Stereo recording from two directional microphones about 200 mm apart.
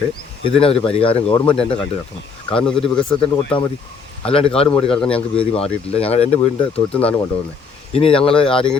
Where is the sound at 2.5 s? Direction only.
5° left (ahead or behind).